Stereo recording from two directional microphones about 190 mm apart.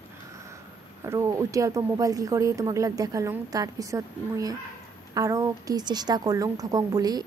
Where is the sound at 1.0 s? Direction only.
15° right (ahead or behind).